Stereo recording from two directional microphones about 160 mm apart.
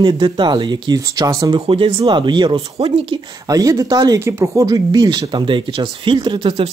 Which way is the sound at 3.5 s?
20° right (ahead or behind).